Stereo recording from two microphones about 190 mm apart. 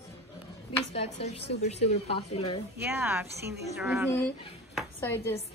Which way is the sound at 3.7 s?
Centre (ahead or behind).